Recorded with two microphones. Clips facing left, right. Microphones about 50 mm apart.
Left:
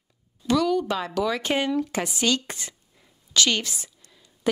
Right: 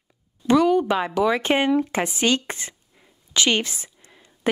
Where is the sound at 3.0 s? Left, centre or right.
Right.